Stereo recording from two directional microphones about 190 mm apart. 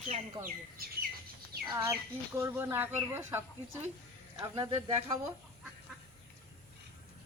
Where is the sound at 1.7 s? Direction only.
15° right (ahead or behind).